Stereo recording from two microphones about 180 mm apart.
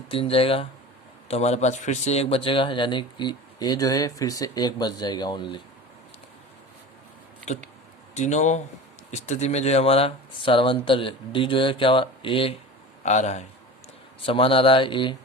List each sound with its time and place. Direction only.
0.1 s a man's voice: 30° left (ahead or behind)
8.1 s a man's voice: 40° left (ahead or behind)
13.0 s speech: 40° left (ahead or behind)
14.3 s a man's voice: 30° left (ahead or behind)